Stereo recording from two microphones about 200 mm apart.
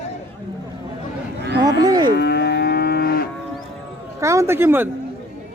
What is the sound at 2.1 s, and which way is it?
Livestock, 55° left (ahead or behind).